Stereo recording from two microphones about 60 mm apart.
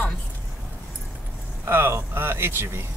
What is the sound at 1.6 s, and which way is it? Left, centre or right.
Speech, right.